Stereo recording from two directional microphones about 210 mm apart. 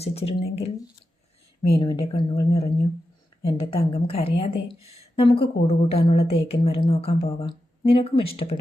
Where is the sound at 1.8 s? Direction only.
20° left (ahead or behind).